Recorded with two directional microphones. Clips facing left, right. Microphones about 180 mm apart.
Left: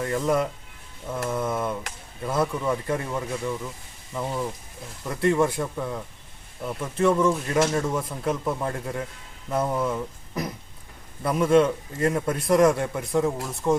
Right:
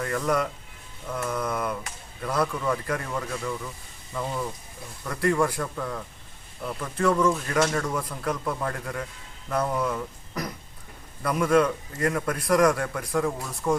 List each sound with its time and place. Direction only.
0.0 s a man's voice: 20° left (ahead or behind)